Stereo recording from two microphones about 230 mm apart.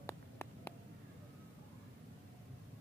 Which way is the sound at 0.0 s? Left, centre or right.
Centre.